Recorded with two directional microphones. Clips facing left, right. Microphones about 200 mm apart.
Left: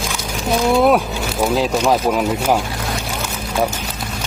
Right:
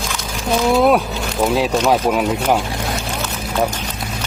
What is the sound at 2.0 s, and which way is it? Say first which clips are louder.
Boat: even; centre (ahead or behind).